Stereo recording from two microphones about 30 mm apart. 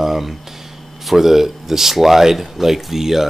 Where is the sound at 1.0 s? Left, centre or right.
Centre.